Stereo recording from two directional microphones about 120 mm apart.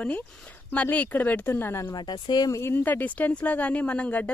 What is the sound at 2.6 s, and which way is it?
Speech, 20° left (ahead or behind).